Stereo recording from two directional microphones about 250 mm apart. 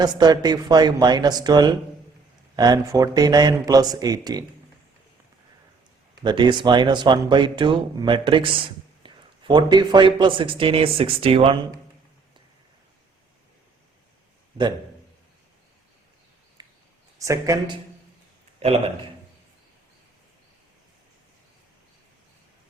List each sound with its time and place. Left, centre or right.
0.0 s speech: centre
6.2 s speech: centre
16.6 s a sound: centre
17.2 s speech: centre